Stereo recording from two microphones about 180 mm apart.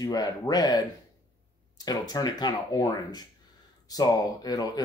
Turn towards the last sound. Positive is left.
turn(degrees=20)  # may be behind; listen again after turning